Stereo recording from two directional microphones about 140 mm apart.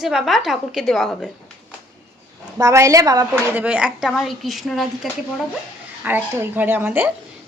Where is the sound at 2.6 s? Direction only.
20° right (ahead or behind).